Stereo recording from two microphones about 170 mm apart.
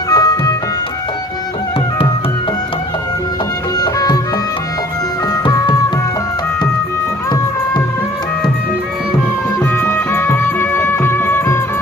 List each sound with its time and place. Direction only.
0.1 s music: 20° left (ahead or behind)
3.8 s music: 20° left (ahead or behind)
5.3 s music: 20° left (ahead or behind)
9.7 s music: 15° left (ahead or behind)